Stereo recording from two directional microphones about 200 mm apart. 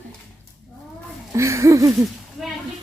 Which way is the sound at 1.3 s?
15° right (ahead or behind).